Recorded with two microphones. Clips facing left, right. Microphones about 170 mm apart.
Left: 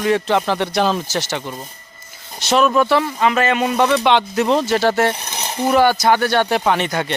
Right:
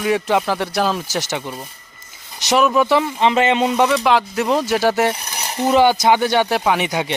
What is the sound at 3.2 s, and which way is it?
Speech, 25° right (ahead or behind).